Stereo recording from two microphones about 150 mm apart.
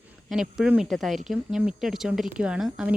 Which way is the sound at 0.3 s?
5° right (ahead or behind).